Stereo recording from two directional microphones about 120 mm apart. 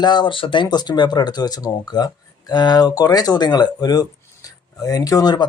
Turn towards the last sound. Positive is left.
turn(degrees=35)  # may be behind; listen again after turning